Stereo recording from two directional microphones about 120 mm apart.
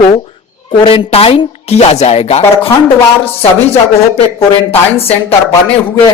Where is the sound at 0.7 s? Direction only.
45° left (ahead or behind).